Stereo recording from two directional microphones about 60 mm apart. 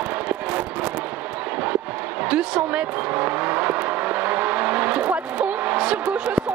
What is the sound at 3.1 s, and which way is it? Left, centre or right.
Vehicle, right.